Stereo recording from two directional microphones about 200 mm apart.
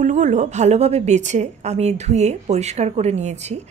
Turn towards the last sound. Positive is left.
turn(degrees=-35)  # may be behind; listen again after turning